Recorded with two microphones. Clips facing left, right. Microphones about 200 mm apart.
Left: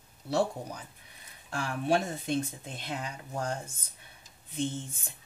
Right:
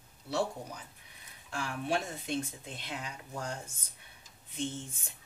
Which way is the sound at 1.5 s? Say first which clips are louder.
Left 5 dB; 40° left (ahead or behind).